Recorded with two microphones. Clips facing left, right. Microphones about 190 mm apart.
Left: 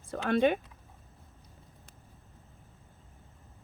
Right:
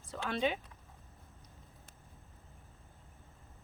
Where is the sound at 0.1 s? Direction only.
55° left (ahead or behind).